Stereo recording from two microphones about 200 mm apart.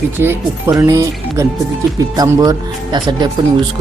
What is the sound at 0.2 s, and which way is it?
Speech, 10° right (ahead or behind).